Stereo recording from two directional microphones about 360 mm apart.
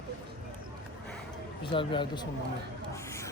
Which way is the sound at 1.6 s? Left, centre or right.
Centre.